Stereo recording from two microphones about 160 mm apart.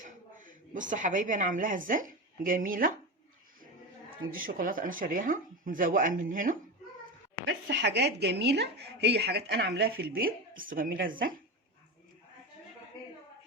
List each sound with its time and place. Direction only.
0.0 s a woman's voice: 55° right (ahead or behind)
4.3 s speech: 60° right (ahead or behind)
7.7 s speech: 90° right; by 11.3 s 60° right (ahead or behind)